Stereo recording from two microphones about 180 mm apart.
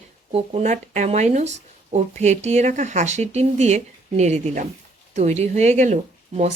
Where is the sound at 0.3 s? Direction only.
35° right (ahead or behind).